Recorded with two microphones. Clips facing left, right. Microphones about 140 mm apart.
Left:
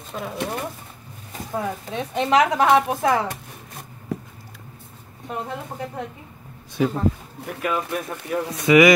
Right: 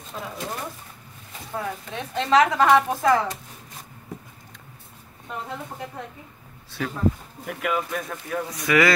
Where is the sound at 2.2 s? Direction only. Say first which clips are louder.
Even; 15° left (ahead or behind).